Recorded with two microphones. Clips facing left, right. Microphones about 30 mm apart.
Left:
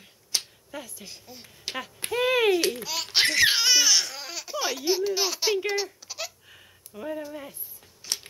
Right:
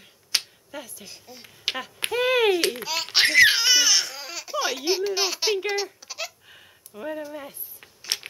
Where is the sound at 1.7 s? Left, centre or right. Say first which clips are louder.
Right 5 dB; right.